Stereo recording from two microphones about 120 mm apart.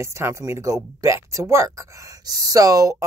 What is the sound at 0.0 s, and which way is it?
Speech, 25° right (ahead or behind).